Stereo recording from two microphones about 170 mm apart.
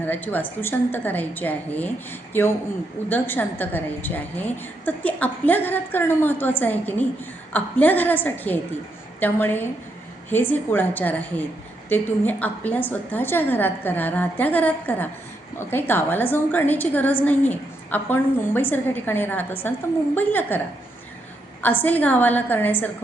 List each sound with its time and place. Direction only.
0.0 s a woman's voice: 10° left (ahead or behind)
21.6 s a woman's voice: 10° left (ahead or behind)